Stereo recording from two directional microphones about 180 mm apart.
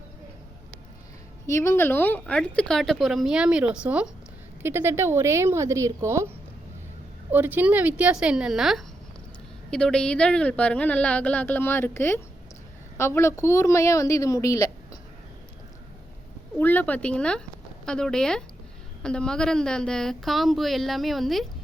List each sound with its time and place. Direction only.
1.5 s speech: 15° left (ahead or behind); by 6.2 s 15° right (ahead or behind)
7.3 s speech: 10° right (ahead or behind); by 14.7 s 20° left (ahead or behind)
16.6 s speech: 10° left (ahead or behind)